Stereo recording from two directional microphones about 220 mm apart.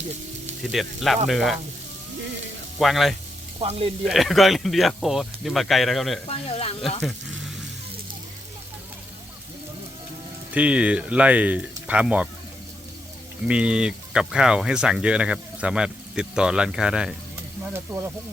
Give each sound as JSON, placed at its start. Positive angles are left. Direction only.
{"t": 0.7, "sound": "speech", "side_deg": 0}
{"t": 2.7, "sound": "speech", "side_deg": 0}
{"t": 3.6, "sound": "speech", "side_deg": -25}
{"t": 4.0, "sound": "speech", "side_deg": 0}
{"t": 6.2, "sound": "speech", "side_deg": 25}
{"t": 10.5, "sound": "speech", "side_deg": -5}
{"t": 13.5, "sound": "speech", "side_deg": -5}